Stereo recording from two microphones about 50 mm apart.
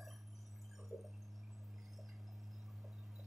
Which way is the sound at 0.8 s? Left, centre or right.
Centre.